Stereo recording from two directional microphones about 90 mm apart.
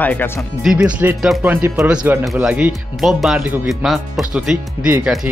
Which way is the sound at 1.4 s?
30° right (ahead or behind).